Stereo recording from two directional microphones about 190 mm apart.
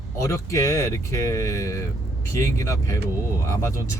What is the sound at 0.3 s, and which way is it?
Speech, 15° left (ahead or behind).